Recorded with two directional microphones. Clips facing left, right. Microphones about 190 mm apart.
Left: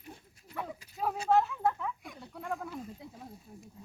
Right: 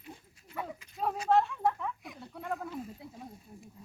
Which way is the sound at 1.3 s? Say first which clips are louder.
Even; 5° left (ahead or behind).